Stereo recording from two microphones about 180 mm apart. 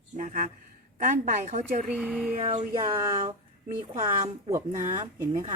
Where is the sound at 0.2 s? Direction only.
45° right (ahead or behind).